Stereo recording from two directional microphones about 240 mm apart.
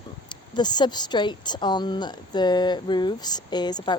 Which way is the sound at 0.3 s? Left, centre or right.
Centre.